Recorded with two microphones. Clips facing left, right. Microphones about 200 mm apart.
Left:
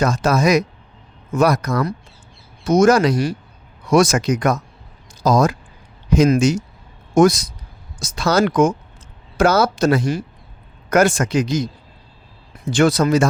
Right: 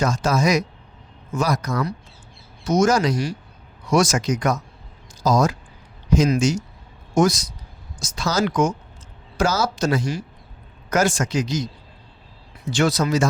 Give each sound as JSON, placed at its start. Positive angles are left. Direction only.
{"t": 0.0, "sound": "a man's voice", "side_deg": 60}